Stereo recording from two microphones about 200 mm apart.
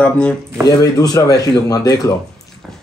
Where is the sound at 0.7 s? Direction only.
20° left (ahead or behind).